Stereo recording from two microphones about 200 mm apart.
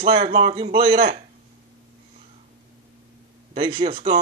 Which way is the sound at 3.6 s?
25° right (ahead or behind).